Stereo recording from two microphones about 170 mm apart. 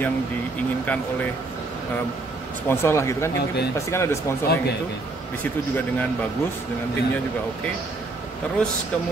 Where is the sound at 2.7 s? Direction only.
15° left (ahead or behind).